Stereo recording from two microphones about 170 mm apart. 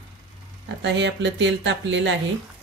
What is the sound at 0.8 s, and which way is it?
Speech, 90° right.